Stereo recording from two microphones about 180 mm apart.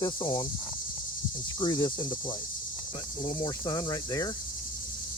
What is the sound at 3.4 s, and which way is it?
Cricket, 25° left (ahead or behind).